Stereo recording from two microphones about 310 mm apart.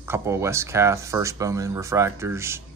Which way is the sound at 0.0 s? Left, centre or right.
Centre.